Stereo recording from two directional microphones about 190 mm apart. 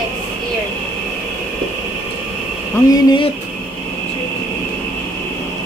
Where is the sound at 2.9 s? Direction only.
20° left (ahead or behind).